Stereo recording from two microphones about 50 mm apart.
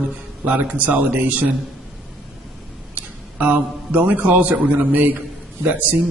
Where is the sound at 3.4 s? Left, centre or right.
Right.